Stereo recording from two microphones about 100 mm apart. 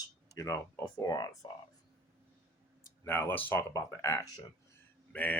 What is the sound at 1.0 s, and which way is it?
Speech, 45° left (ahead or behind).